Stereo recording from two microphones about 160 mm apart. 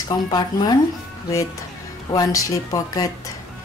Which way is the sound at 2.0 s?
20° left (ahead or behind).